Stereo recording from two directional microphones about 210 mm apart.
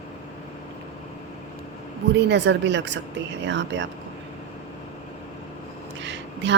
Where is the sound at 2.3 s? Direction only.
55° right (ahead or behind).